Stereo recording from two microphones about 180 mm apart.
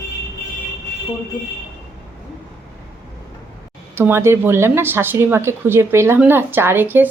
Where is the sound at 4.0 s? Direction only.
15° right (ahead or behind).